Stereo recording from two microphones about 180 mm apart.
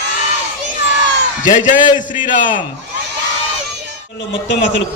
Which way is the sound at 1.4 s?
45° left (ahead or behind).